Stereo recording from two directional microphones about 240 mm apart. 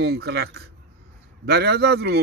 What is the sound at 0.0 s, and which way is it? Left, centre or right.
Speech, right.